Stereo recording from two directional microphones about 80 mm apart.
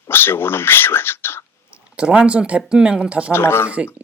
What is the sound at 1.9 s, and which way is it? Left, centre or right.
Speech, centre.